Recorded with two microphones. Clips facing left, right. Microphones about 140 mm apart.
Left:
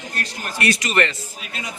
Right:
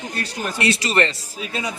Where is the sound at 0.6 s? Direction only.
30° right (ahead or behind).